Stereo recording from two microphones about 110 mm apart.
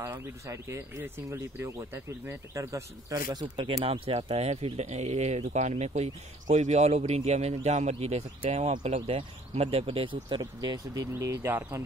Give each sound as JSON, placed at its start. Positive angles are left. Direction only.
{"t": 0.0, "sound": "speech", "side_deg": -25}
{"t": 3.3, "sound": "a man's voice", "side_deg": -50}
{"t": 10.4, "sound": "speech", "side_deg": -35}